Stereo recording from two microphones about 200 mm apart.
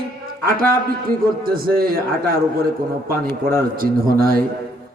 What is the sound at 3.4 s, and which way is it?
A man's voice, 50° right (ahead or behind).